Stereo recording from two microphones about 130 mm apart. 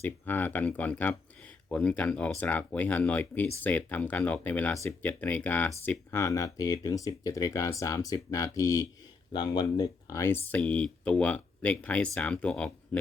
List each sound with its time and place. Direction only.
0.0 s speech: 15° left (ahead or behind)